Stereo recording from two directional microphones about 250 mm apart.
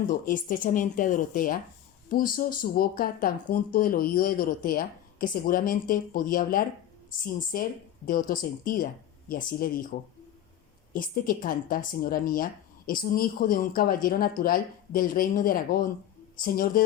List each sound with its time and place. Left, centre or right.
0.1 s a woman's voice: left